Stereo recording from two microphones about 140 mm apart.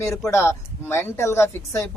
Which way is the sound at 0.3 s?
20° left (ahead or behind).